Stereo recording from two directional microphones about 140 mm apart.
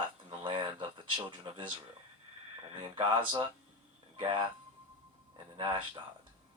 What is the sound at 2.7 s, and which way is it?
Speech, 35° right (ahead or behind).